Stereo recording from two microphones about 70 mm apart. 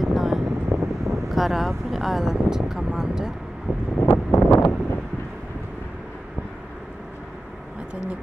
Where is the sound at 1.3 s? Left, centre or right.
Centre.